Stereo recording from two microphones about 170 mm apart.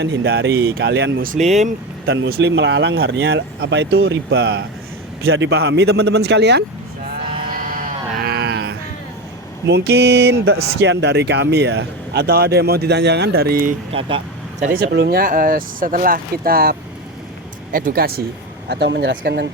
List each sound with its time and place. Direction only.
0.0 s speech: 90° right
1.2 s speech: 45° right (ahead or behind)
2.0 s speech: 80° right
7.5 s a sound: 55° right (ahead or behind); by 8.7 s 75° right (ahead or behind)
9.6 s speech: 75° right (ahead or behind)
10.8 s speech: 90° right; by 15.2 s 75° right (ahead or behind)
15.2 s speech: 55° right (ahead or behind); by 19.5 s 75° right (ahead or behind)